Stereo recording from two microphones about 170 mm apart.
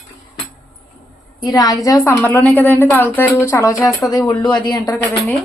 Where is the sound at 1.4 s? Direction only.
20° left (ahead or behind).